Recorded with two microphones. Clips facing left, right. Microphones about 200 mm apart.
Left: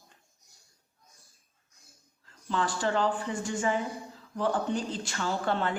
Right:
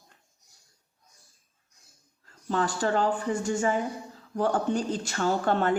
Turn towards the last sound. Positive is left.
turn(degrees=-45)  # may be behind; listen again after turning